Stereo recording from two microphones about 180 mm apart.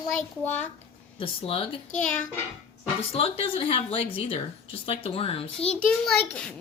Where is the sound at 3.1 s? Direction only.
35° left (ahead or behind).